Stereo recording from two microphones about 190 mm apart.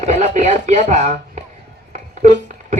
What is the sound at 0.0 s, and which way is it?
Speech, 40° right (ahead or behind).